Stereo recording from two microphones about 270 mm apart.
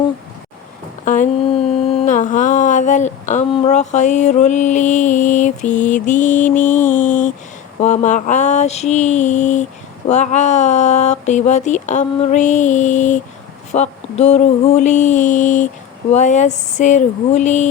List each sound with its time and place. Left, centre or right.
1.0 s a sound: left
5.7 s speech: left
6.7 s mantra: centre
7.8 s speech: left